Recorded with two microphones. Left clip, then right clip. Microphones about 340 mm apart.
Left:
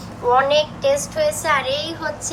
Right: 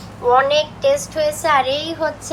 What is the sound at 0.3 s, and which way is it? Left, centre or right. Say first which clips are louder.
A woman's voice: right 1 dB; centre.